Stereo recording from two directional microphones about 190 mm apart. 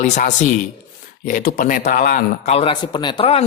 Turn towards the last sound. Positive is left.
turn(degrees=30)  # may be behind; listen again after turning